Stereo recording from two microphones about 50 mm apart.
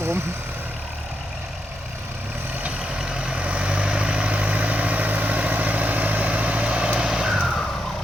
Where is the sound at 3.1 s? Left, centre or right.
Right.